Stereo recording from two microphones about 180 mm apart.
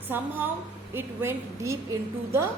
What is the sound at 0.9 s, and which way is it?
A woman's voice, 15° right (ahead or behind).